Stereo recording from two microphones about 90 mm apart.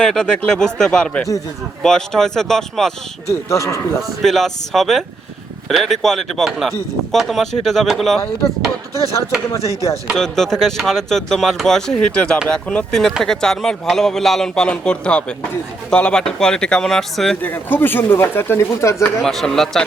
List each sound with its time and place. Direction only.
0.0 s a man's voice: 10° left (ahead or behind)
3.2 s speech: 35° left (ahead or behind)
4.2 s a man's voice: 5° left (ahead or behind)
9.5 s speech: 35° left (ahead or behind)
10.2 s a man's voice: 5° left (ahead or behind)
17.4 s speech: 20° left (ahead or behind)
19.2 s a man's voice: centre (ahead or behind)